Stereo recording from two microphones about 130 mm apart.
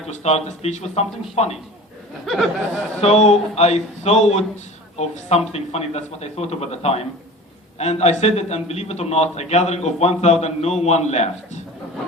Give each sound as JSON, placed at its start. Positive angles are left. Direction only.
{"t": 0.1, "sound": "a man's voice", "side_deg": 55}
{"t": 2.2, "sound": "speech", "side_deg": 0}
{"t": 3.0, "sound": "a man's voice", "side_deg": 60}